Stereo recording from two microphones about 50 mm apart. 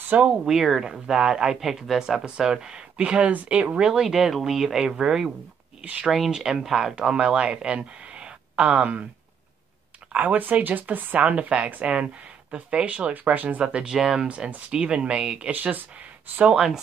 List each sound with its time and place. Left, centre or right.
0.3 s speech: centre
3.0 s speech: right
3.7 s speech: centre
5.9 s speech: right
6.1 s speech: centre; by 9.0 s right
10.1 s speech: right
11.2 s speech: right
13.1 s speech: right
13.7 s speech: centre
13.9 s speech: centre
14.2 s speech: right
15.5 s speech: right
16.5 s speech: centre